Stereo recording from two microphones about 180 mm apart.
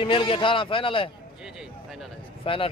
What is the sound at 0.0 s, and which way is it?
A man's voice, 30° left (ahead or behind).